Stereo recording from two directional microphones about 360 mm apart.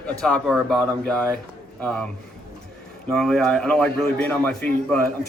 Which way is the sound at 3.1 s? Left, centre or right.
Centre.